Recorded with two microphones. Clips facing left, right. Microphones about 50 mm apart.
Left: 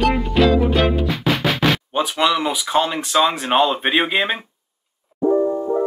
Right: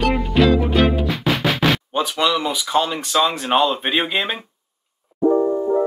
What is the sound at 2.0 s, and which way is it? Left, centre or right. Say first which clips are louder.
Speech: left 3 dB; centre.